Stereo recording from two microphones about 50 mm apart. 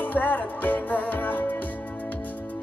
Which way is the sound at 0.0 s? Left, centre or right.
Left.